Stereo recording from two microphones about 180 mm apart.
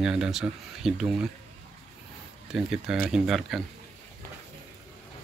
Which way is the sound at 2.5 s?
5° right (ahead or behind).